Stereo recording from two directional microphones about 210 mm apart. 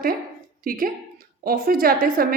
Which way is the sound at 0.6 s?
45° right (ahead or behind).